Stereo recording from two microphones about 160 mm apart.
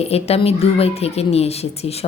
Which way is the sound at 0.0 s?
40° left (ahead or behind).